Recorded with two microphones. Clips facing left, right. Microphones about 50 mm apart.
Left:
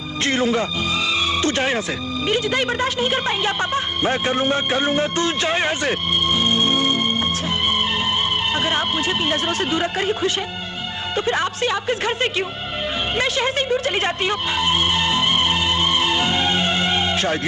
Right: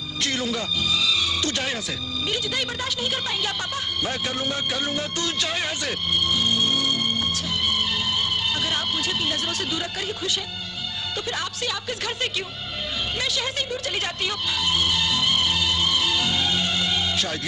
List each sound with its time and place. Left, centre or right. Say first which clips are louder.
0.2 s music: left 7 dB; left
2.2 s speech: left 8 dB; left
13.1 s music: left 8 dB; left